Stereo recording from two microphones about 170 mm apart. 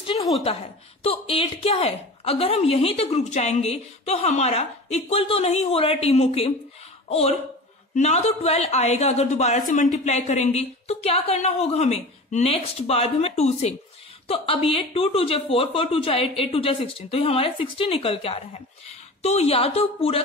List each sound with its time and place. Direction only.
1.0 s a woman's voice: 35° left (ahead or behind)